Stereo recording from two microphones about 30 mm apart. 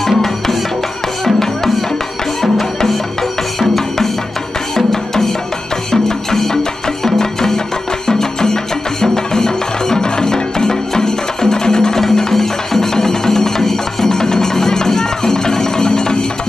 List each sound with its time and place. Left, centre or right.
0.0 s music: centre
3.5 s music: centre; by 16.3 s left